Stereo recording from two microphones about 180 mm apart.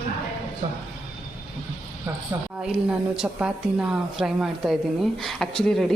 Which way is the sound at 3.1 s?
5° right (ahead or behind).